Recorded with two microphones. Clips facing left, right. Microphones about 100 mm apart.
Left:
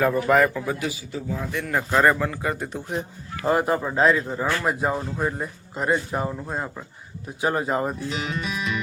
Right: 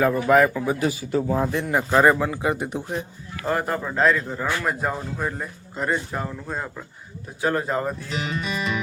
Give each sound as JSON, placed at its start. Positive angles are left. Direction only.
{"t": 0.0, "sound": "a man's voice", "side_deg": 0}
{"t": 0.8, "sound": "a man's voice", "side_deg": -45}
{"t": 1.7, "sound": "speech", "side_deg": -10}
{"t": 3.4, "sound": "speech", "side_deg": 15}
{"t": 8.1, "sound": "speech", "side_deg": 0}